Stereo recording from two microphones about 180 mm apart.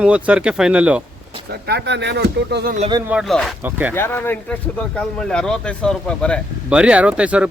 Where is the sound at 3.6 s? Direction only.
10° right (ahead or behind).